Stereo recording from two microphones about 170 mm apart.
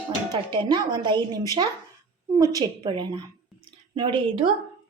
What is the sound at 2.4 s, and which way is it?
A woman's voice, 20° right (ahead or behind).